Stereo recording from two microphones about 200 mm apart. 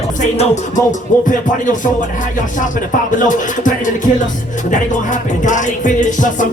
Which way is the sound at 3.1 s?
40° left (ahead or behind).